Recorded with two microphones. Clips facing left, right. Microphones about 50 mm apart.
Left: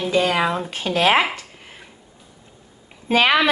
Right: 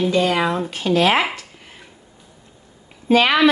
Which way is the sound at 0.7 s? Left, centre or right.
Left.